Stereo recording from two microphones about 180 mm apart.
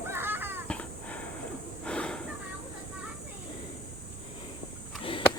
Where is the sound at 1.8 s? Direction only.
5° left (ahead or behind).